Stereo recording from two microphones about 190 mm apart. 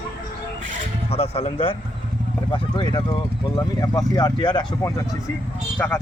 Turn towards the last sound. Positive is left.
turn(degrees=10)  # may be behind; listen again after turning